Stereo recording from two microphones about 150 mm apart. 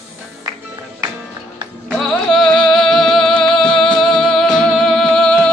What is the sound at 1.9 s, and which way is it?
Music, centre (ahead or behind).